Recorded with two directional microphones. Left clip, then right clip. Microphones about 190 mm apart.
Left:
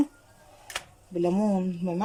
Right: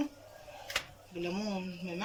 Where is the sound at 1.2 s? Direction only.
45° left (ahead or behind).